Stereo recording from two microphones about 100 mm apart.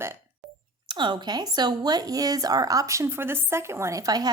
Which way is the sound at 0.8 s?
50° right (ahead or behind).